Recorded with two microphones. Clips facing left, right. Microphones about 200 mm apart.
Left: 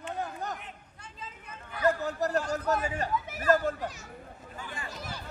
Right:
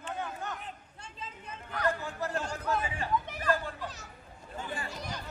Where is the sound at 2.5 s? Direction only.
40° left (ahead or behind).